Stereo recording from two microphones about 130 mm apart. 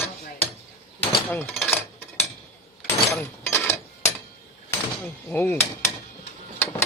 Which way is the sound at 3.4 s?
20° left (ahead or behind).